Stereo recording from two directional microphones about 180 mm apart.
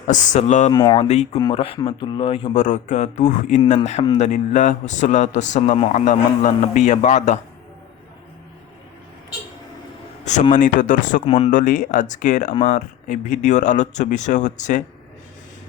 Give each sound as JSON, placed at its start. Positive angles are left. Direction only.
{"t": 0.1, "sound": "speech", "side_deg": 45}
{"t": 0.7, "sound": "speech", "side_deg": 20}
{"t": 1.0, "sound": "a man's voice", "side_deg": 35}
{"t": 2.6, "sound": "a man's voice", "side_deg": 45}
{"t": 10.5, "sound": "speech", "side_deg": 45}